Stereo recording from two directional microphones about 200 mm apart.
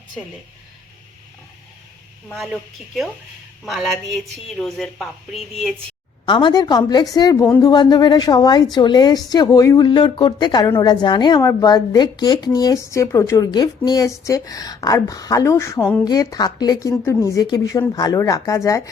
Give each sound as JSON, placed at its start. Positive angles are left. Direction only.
{"t": 2.3, "sound": "a woman's voice", "side_deg": 0}
{"t": 6.2, "sound": "a woman's voice", "side_deg": 25}